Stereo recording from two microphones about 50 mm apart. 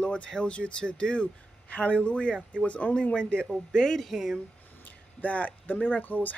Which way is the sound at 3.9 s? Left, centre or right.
Centre.